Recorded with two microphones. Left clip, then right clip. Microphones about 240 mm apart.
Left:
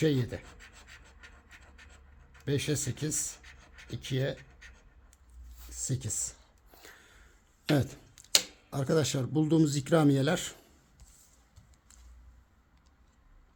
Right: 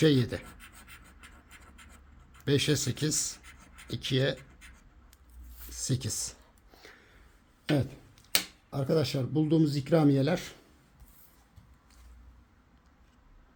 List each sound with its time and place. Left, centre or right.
0.0 s speech: centre
2.4 s speech: centre
5.7 s speech: centre
6.7 s a sound: centre
7.7 s speech: left